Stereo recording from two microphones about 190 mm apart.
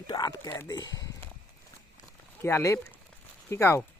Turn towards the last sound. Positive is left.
turn(degrees=15)  # may be behind; listen again after turning